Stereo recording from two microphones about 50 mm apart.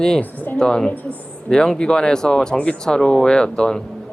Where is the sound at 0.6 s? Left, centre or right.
Centre.